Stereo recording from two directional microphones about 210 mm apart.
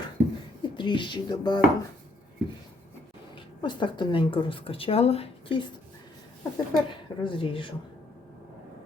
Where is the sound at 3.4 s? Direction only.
20° left (ahead or behind).